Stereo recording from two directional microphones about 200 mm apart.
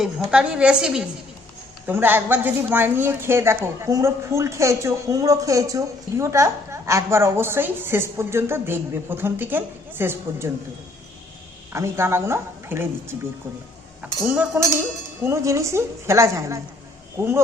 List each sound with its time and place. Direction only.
0.3 s a woman's voice: 5° right (ahead or behind)
11.7 s a woman's voice: 15° right (ahead or behind)
14.2 s a woman's voice: 10° right (ahead or behind)